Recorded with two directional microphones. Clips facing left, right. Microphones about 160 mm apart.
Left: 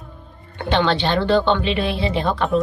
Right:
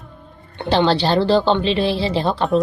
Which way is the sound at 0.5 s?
30° right (ahead or behind).